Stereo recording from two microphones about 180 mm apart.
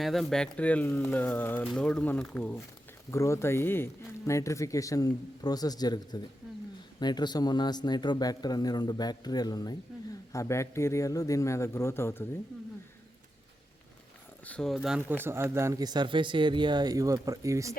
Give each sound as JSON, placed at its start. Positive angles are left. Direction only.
{"t": 0.0, "sound": "a man's voice", "side_deg": 0}
{"t": 14.4, "sound": "speech", "side_deg": 5}